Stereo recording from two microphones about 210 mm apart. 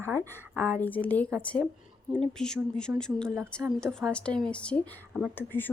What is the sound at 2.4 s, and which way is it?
Speech, 5° left (ahead or behind).